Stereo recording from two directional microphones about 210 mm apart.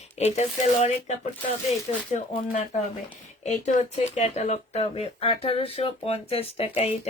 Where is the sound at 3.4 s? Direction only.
35° left (ahead or behind).